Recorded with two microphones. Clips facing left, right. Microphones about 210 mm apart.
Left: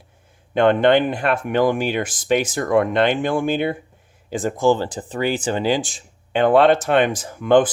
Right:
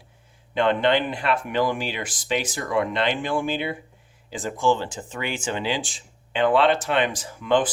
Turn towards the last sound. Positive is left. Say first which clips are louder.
# left 6 dB
turn(degrees=50)  # may be behind; listen again after turning